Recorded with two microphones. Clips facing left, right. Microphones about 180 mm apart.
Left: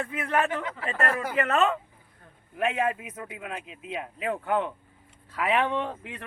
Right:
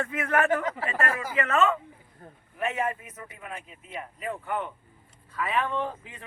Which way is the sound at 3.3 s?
90° left.